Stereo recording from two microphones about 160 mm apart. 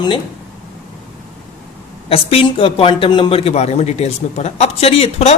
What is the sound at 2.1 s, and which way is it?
Speech, 35° left (ahead or behind).